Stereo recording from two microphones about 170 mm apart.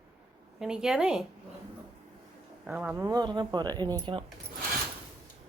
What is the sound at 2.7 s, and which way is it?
Speech, 5° right (ahead or behind).